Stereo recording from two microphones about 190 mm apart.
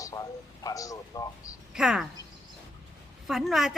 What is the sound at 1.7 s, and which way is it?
Speech, centre (ahead or behind).